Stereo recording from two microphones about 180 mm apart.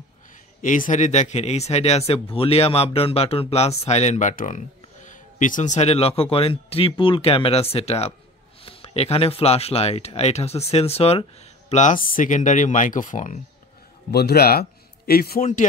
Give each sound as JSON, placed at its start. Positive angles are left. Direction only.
{"t": 0.6, "sound": "speech", "side_deg": 45}
{"t": 14.1, "sound": "a man's voice", "side_deg": 60}